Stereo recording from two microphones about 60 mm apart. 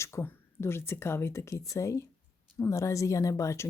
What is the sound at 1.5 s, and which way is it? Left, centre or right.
A woman's voice, left.